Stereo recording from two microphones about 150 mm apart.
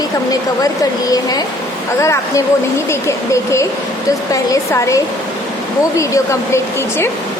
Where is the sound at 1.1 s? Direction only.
25° left (ahead or behind).